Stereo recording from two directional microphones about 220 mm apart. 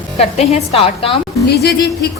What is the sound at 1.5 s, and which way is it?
Music, 45° left (ahead or behind).